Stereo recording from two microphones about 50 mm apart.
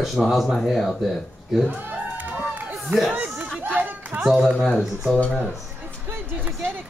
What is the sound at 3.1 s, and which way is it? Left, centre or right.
Speech, right.